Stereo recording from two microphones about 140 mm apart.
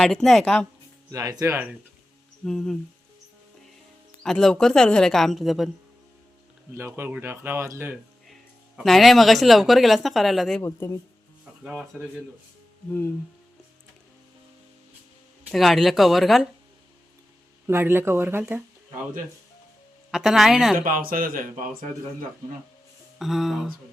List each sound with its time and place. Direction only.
0.0 s speech: centre (ahead or behind)
1.1 s speech: 25° right (ahead or behind)
2.4 s speech: 5° left (ahead or behind)
4.2 s speech: 5° left (ahead or behind)
6.7 s speech: 15° right (ahead or behind)
8.3 s speech: centre (ahead or behind)
10.6 s speech: 20° left (ahead or behind)
11.6 s speech: 5° right (ahead or behind)
12.9 s music: 15° left (ahead or behind)
15.4 s speech: centre (ahead or behind)
17.7 s speech: 15° right (ahead or behind)
20.1 s speech: centre (ahead or behind)
20.7 s speech: 75° right (ahead or behind)
23.1 s speech: centre (ahead or behind)